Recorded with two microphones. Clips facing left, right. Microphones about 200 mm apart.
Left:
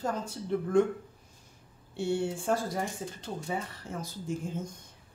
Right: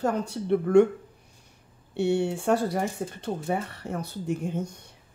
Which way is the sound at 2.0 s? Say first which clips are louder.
Right 6 dB; 70° right (ahead or behind).